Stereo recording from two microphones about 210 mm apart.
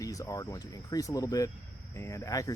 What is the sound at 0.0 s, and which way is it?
Speech, 15° left (ahead or behind).